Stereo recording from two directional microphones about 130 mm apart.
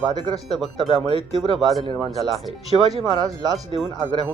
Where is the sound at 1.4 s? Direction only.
Centre (ahead or behind).